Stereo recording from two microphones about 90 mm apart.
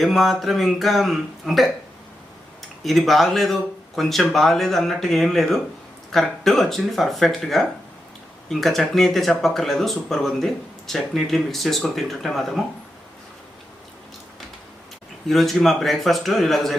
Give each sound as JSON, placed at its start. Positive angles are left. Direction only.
{"t": 0.0, "sound": "speech", "side_deg": 0}
{"t": 2.8, "sound": "speech", "side_deg": 0}
{"t": 15.3, "sound": "speech", "side_deg": 0}